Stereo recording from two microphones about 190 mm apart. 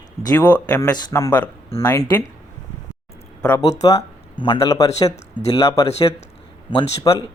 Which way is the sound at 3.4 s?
10° left (ahead or behind).